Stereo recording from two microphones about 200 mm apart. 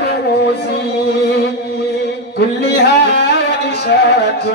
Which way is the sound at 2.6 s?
55° left (ahead or behind).